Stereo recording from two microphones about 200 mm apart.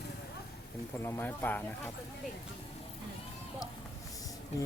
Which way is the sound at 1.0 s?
10° left (ahead or behind).